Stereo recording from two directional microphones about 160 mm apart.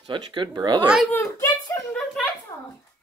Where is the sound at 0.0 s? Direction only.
30° right (ahead or behind).